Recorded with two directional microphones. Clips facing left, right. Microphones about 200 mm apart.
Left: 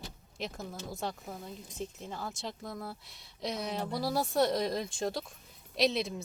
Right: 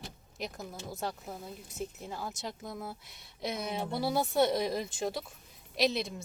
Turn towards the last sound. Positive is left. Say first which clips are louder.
# left 1 dB
turn(degrees=0)  # may be behind; listen again after turning